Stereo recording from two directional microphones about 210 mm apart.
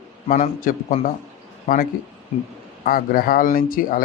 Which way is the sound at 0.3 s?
35° left (ahead or behind).